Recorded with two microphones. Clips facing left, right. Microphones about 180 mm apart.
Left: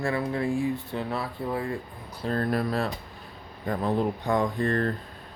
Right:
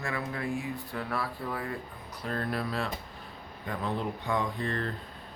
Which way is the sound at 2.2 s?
35° left (ahead or behind).